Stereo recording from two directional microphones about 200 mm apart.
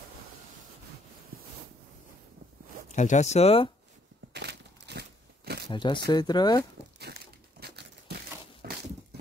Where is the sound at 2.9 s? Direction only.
35° left (ahead or behind).